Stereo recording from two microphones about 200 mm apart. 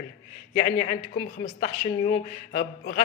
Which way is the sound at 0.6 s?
35° left (ahead or behind).